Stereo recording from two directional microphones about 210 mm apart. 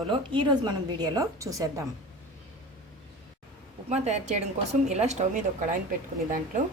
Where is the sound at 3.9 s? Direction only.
35° right (ahead or behind).